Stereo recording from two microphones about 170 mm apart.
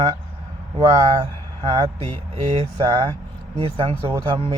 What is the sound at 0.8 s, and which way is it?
A man's voice, 30° right (ahead or behind).